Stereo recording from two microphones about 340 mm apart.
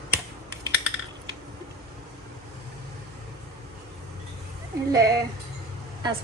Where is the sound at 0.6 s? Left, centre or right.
Centre.